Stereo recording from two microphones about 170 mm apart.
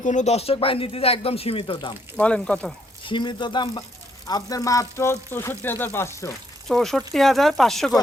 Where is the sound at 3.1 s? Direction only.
30° left (ahead or behind).